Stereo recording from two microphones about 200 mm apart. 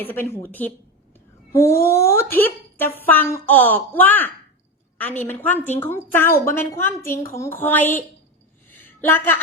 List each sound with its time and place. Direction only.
0.0 s speech: 10° left (ahead or behind)